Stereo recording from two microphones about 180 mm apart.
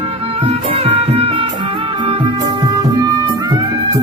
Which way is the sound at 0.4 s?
35° right (ahead or behind).